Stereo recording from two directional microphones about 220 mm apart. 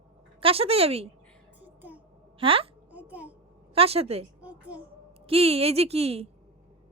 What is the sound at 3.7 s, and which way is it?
Speech, 25° right (ahead or behind).